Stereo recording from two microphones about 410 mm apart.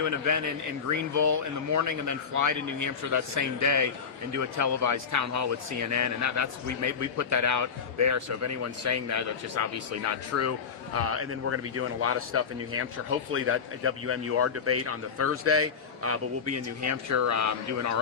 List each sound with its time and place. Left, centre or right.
0.9 s speech: right